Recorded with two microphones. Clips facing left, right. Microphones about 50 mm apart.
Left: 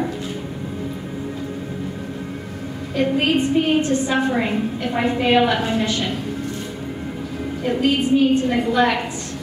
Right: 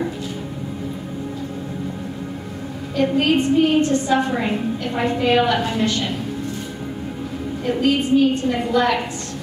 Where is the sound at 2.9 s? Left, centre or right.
Centre.